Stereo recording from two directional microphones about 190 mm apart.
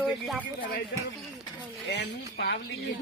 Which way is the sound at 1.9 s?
65° left (ahead or behind).